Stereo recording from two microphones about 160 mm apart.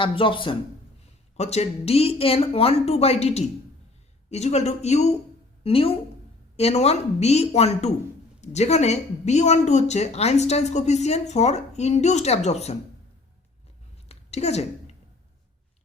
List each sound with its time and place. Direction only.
0.0 s speech: 30° left (ahead or behind)
1.4 s speech: 40° left (ahead or behind)
14.1 s a sound: 40° left (ahead or behind)